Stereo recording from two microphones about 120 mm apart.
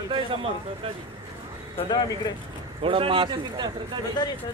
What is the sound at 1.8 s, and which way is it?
Speech, 35° left (ahead or behind).